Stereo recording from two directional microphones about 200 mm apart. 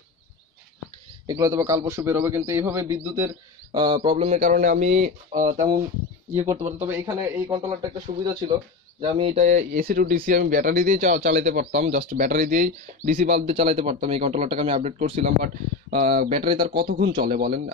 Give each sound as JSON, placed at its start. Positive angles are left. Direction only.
{"t": 1.2, "sound": "a man's voice", "side_deg": -15}
{"t": 3.7, "sound": "speech", "side_deg": -25}
{"t": 6.3, "sound": "a man's voice", "side_deg": -15}
{"t": 9.2, "sound": "speech", "side_deg": -35}
{"t": 11.8, "sound": "speech", "side_deg": -30}
{"t": 12.2, "sound": "speech", "side_deg": -45}